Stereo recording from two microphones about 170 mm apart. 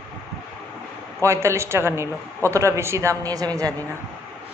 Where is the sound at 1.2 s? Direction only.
15° right (ahead or behind).